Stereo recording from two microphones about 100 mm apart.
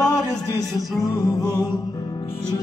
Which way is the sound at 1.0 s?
30° left (ahead or behind).